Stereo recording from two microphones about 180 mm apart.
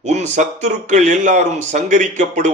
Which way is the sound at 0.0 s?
40° right (ahead or behind).